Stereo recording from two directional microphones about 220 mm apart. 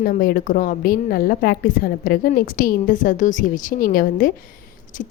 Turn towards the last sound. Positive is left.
turn(degrees=35)  # may be behind; listen again after turning